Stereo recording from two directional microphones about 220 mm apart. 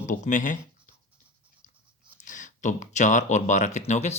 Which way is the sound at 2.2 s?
35° left (ahead or behind).